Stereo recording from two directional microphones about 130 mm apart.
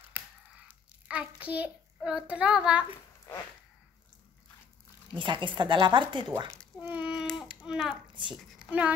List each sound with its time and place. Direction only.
0.7 s a sound: 10° right (ahead or behind)
2.0 s speech: 10° right (ahead or behind)
5.2 s speech: 40° right (ahead or behind)
6.8 s a sound: 10° right (ahead or behind)
7.2 s speech: 5° right (ahead or behind)
8.1 s a child's voice: 40° right (ahead or behind)
8.4 s a woman's voice: 5° right (ahead or behind)